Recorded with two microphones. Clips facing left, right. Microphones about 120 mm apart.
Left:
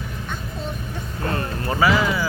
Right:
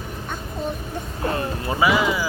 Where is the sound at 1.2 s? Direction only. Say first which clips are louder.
Right 1 dB; 15° right (ahead or behind).